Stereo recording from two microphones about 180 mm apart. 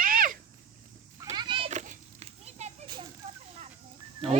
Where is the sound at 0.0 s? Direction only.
50° right (ahead or behind).